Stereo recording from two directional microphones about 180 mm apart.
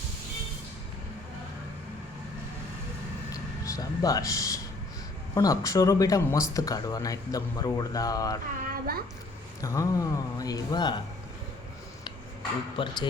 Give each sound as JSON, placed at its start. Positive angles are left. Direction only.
{"t": 3.6, "sound": "speech", "side_deg": 20}
{"t": 8.7, "sound": "a sound", "side_deg": -55}
{"t": 9.6, "sound": "speech", "side_deg": 15}
{"t": 12.7, "sound": "speech", "side_deg": 25}